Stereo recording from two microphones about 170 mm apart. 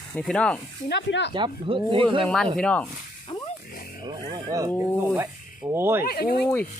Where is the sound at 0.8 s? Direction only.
85° left.